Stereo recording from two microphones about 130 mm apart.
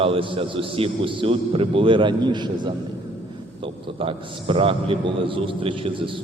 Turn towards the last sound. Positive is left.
turn(degrees=-40)  # may be behind; listen again after turning